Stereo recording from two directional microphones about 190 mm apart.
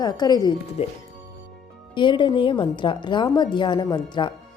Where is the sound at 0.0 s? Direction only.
20° left (ahead or behind).